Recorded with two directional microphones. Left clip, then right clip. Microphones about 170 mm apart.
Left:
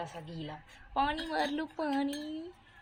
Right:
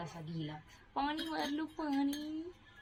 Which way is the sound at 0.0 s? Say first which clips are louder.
Left 4 dB; 50° left (ahead or behind).